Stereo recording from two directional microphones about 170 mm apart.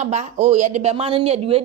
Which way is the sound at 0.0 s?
40° right (ahead or behind).